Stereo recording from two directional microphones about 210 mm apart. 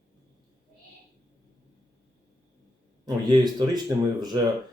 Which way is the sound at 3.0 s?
20° right (ahead or behind).